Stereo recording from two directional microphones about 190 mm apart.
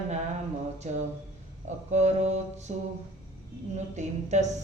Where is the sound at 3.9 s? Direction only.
40° right (ahead or behind).